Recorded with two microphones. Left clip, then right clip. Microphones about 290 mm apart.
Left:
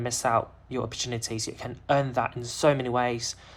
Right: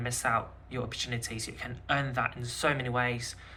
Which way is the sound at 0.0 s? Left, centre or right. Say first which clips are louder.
Left 5 dB; left.